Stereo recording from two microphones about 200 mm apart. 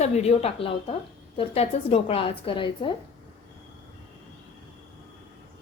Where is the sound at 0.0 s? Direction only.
30° left (ahead or behind).